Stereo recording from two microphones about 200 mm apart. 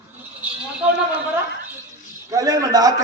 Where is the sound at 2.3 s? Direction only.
15° right (ahead or behind).